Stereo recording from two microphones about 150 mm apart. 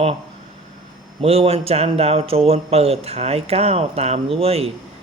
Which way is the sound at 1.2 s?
40° right (ahead or behind).